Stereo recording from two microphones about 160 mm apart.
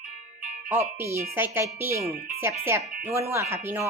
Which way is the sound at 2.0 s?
70° right (ahead or behind).